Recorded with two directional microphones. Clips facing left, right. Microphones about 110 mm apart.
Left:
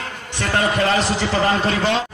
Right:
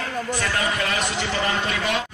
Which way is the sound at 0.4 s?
30° left (ahead or behind).